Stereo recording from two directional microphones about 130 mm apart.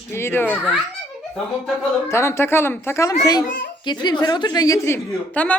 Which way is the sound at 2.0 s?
20° left (ahead or behind).